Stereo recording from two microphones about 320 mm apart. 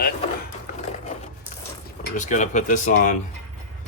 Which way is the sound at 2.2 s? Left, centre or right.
Left.